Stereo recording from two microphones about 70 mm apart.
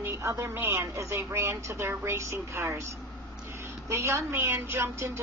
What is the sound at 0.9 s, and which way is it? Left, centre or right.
Speech, right.